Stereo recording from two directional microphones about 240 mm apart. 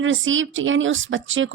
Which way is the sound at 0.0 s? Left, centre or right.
Right.